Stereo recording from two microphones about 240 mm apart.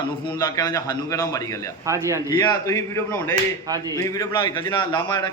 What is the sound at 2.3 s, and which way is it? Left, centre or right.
A man's voice, centre.